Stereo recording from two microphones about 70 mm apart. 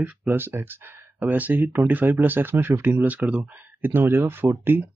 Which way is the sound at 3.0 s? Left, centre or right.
Centre.